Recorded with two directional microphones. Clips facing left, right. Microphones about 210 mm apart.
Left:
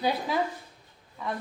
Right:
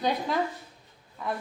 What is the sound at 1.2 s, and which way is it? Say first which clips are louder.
Speech: right 1 dB; centre (ahead or behind).